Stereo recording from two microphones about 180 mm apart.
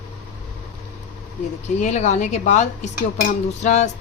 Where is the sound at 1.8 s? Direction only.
40° left (ahead or behind).